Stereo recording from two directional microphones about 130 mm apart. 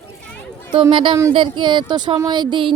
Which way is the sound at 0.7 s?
40° right (ahead or behind).